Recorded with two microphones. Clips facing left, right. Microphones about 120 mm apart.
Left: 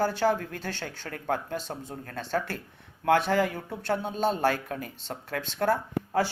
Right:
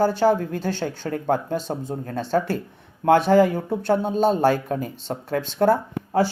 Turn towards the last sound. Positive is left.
turn(degrees=-35)  # may be behind; listen again after turning